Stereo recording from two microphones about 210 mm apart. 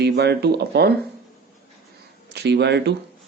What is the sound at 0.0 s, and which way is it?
Speech, 50° right (ahead or behind).